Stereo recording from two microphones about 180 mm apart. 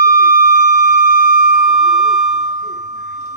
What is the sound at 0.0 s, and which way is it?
Siren, 55° left (ahead or behind).